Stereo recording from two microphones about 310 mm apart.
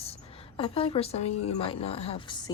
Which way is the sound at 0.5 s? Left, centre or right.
Centre.